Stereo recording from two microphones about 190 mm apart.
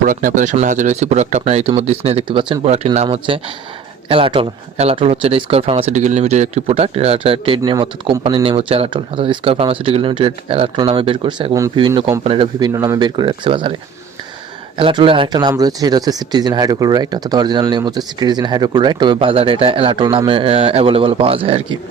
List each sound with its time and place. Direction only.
0.0 s speech: 45° right (ahead or behind); by 13.7 s 25° right (ahead or behind)
14.8 s speech: 30° right (ahead or behind)